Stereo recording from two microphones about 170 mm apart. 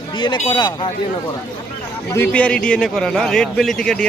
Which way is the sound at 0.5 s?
25° left (ahead or behind).